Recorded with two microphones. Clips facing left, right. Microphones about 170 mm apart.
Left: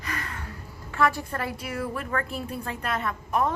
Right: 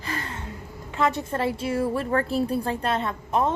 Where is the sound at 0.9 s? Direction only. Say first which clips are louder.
Right 1 dB; 20° right (ahead or behind).